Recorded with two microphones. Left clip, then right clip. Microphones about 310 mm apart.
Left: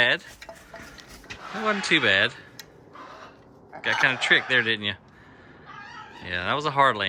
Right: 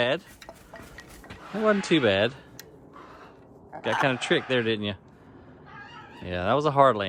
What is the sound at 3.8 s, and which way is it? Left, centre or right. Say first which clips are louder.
Speech: left 3 dB; centre.